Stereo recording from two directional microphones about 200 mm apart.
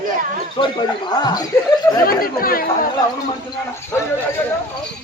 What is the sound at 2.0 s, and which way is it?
Speech, 45° left (ahead or behind).